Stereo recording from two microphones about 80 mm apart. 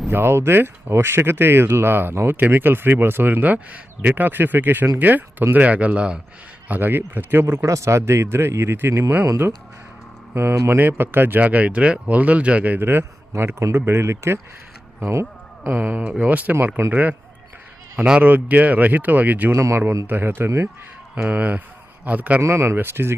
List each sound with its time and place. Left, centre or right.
0.1 s speech: right
15.1 s a sound: right
15.7 s speech: right
19.5 s speech: right
21.2 s speech: centre
22.4 s speech: right